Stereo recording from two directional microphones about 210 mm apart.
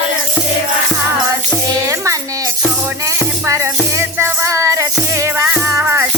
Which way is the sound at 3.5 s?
15° right (ahead or behind).